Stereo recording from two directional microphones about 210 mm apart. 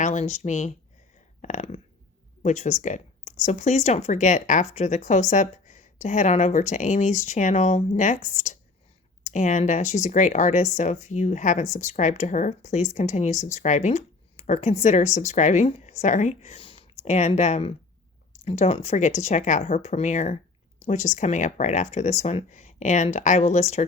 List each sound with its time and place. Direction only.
0.0 s speech: 35° left (ahead or behind)